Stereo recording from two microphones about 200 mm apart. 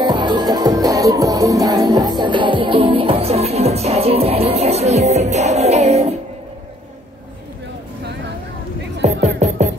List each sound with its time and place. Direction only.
0.0 s music: 20° right (ahead or behind)
9.0 s music: 35° right (ahead or behind)